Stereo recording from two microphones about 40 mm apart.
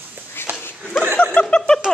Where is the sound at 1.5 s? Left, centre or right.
Left.